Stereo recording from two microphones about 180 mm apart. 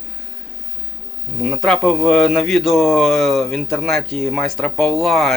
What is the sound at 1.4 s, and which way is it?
Speech, centre (ahead or behind).